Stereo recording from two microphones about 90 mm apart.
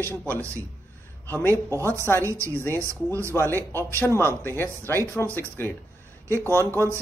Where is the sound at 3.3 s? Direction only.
25° left (ahead or behind).